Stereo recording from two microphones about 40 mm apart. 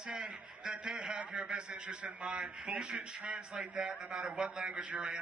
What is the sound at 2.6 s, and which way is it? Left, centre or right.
Speech, centre.